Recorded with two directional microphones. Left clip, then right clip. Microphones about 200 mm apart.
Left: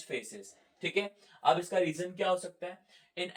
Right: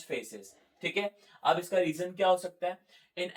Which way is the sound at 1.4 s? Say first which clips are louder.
Even; 10° left (ahead or behind).